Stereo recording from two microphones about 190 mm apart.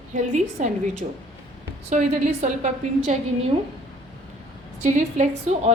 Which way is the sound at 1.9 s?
40° right (ahead or behind).